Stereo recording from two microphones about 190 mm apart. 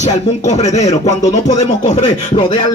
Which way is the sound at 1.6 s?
30° left (ahead or behind).